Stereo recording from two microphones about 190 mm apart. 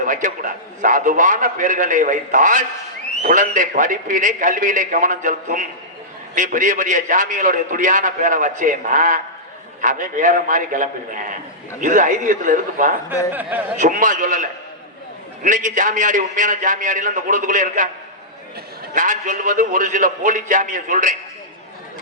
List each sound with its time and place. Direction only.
0.0 s a man's voice: 45° right (ahead or behind)
13.3 s a man's voice: 10° right (ahead or behind)
13.7 s a man's voice: 40° right (ahead or behind)
15.4 s a man's voice: 40° right (ahead or behind)
18.9 s a man's voice: 45° right (ahead or behind)